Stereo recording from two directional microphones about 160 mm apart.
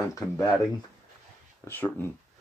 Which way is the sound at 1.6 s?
10° left (ahead or behind).